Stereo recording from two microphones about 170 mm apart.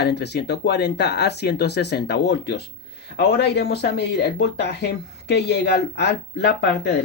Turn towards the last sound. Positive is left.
turn(degrees=90)